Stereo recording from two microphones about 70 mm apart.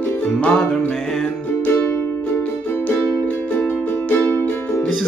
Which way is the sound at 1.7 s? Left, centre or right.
Left.